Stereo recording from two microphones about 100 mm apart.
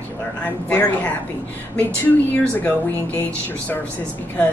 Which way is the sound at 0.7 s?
20° left (ahead or behind).